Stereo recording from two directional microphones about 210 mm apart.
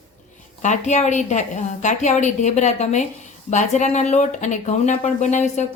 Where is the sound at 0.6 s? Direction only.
35° left (ahead or behind).